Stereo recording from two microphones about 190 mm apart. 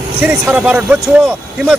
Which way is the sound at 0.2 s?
10° right (ahead or behind).